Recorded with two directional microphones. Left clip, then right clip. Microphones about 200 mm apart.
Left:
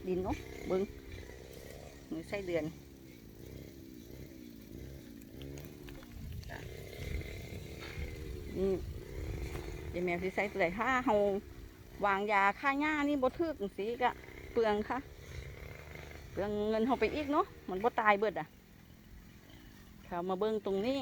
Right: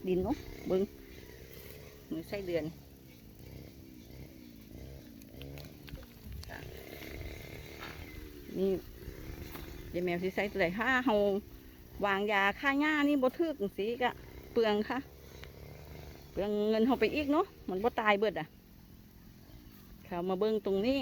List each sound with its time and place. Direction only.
2.0 s speech: 15° right (ahead or behind)
8.5 s speech: 20° right (ahead or behind)
9.9 s speech: 25° right (ahead or behind)
16.3 s speech: 20° right (ahead or behind)
20.1 s speech: 25° right (ahead or behind)